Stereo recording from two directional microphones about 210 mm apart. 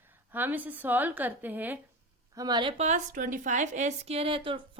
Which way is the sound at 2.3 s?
20° right (ahead or behind).